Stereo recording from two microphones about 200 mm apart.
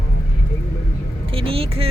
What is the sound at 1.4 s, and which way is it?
Speech, 30° right (ahead or behind).